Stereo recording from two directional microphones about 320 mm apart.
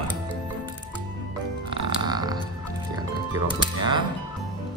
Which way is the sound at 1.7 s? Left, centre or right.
Centre.